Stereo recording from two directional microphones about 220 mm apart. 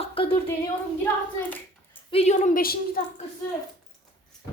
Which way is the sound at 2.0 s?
30° left (ahead or behind).